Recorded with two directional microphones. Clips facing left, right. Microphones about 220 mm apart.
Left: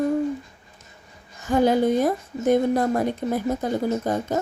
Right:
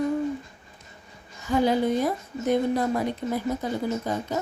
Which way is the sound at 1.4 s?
50° left (ahead or behind).